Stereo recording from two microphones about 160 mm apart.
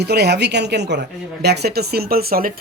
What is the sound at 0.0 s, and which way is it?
A woman's voice, 90° right.